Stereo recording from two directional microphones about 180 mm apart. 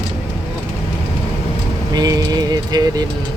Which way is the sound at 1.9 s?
20° right (ahead or behind).